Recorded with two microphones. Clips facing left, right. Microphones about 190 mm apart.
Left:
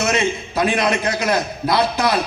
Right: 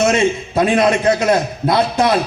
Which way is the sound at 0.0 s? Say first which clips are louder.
Right 5 dB; 25° right (ahead or behind).